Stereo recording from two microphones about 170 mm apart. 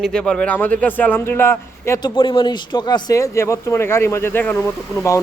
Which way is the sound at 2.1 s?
30° left (ahead or behind).